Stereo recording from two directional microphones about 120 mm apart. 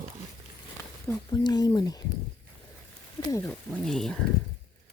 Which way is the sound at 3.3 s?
25° left (ahead or behind).